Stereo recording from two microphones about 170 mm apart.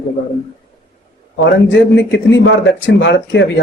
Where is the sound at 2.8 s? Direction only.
90° left.